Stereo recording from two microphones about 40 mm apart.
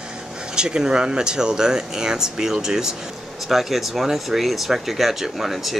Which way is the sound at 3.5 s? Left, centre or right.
Centre.